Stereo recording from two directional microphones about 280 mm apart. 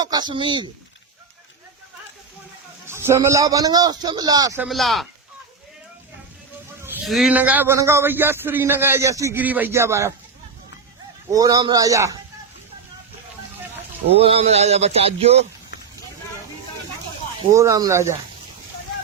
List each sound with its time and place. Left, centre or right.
0.0 s a man's voice: centre
2.8 s a man's voice: centre
6.8 s a man's voice: centre
11.3 s a man's voice: centre
14.1 s speech: right
17.4 s a man's voice: centre